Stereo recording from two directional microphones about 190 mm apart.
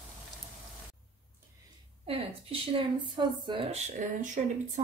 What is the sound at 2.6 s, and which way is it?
Speech, 25° right (ahead or behind).